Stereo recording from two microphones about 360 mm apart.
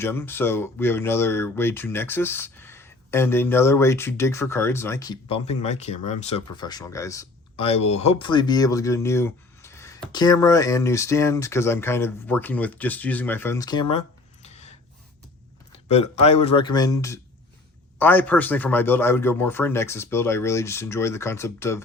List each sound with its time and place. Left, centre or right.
0.0 s speech: centre
14.4 s a sound: centre
15.9 s speech: centre